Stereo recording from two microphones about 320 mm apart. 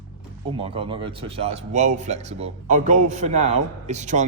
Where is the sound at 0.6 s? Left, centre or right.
Centre.